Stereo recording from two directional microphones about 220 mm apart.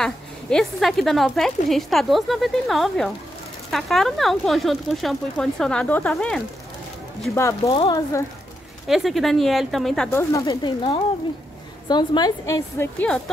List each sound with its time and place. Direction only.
0.0 s a woman's voice: centre (ahead or behind)
7.3 s a woman's voice: 15° left (ahead or behind)
8.8 s a woman's voice: centre (ahead or behind)
10.1 s a woman's voice: 15° left (ahead or behind)